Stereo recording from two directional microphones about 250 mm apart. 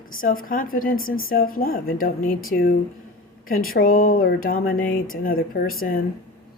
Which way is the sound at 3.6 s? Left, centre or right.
Left.